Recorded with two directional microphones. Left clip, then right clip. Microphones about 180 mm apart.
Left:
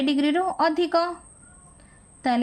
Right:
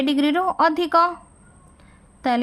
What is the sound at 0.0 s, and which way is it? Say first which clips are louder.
A woman's voice: right 3 dB; 35° right (ahead or behind).